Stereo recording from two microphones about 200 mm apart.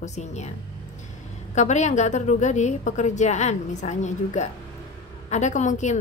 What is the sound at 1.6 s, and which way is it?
A woman's voice, 35° left (ahead or behind).